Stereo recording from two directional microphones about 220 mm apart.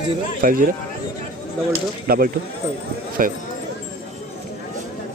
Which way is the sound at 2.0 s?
40° right (ahead or behind).